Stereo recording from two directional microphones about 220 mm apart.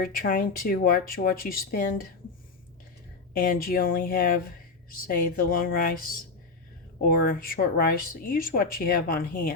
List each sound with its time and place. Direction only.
0.1 s speech: 40° left (ahead or behind)
3.3 s speech: 40° left (ahead or behind)